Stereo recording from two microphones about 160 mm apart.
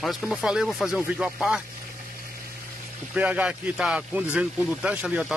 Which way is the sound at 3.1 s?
10° right (ahead or behind).